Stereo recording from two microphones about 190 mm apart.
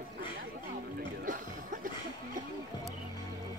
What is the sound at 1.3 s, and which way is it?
Music, 45° right (ahead or behind).